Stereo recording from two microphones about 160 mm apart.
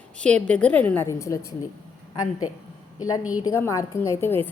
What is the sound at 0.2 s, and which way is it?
A woman's voice, 5° left (ahead or behind).